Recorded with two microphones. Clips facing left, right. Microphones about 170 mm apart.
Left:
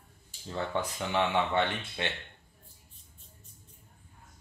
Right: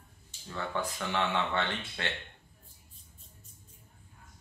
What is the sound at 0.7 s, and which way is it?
Speech, 20° left (ahead or behind).